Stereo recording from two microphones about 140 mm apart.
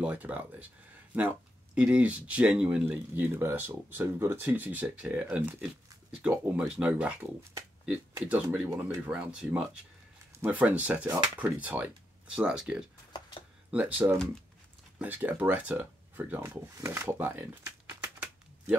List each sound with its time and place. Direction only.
0.0 s speech: 10° right (ahead or behind)
1.8 s speech: 10° right (ahead or behind)
14.1 s speech: 5° left (ahead or behind)
15.0 s speech: 15° right (ahead or behind)